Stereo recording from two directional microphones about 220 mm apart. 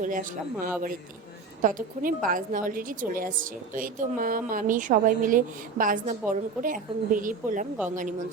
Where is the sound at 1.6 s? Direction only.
40° right (ahead or behind).